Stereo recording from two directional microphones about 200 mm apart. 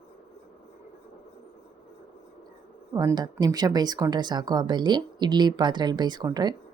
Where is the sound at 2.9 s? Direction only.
20° right (ahead or behind).